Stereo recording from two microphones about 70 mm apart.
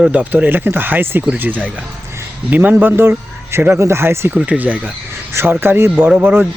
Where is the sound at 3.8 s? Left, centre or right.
Right.